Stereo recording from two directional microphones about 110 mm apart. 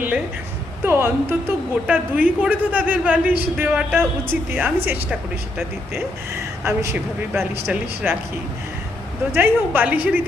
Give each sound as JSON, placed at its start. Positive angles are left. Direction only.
{"t": 0.9, "sound": "a woman's voice", "side_deg": -20}
{"t": 6.9, "sound": "speech", "side_deg": -20}
{"t": 9.3, "sound": "a woman's voice", "side_deg": -20}